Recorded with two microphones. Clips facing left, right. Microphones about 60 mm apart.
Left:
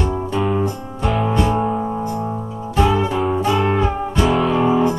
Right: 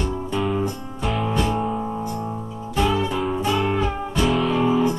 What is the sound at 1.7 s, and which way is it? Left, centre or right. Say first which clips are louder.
Music: left 4 dB; centre.